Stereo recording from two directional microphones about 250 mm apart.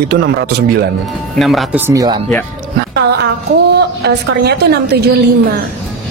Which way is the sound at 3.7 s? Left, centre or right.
Right.